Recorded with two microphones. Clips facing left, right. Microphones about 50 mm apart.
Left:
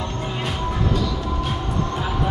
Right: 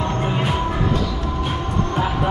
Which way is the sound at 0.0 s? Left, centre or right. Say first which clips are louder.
Right 5 dB; right.